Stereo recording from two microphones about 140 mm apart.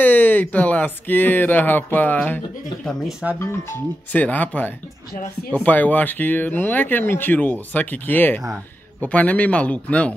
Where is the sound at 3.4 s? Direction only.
15° left (ahead or behind).